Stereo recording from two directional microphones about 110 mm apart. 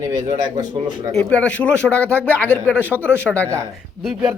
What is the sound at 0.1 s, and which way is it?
Speech, 40° right (ahead or behind).